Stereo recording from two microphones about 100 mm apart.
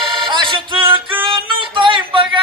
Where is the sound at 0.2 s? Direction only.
50° right (ahead or behind).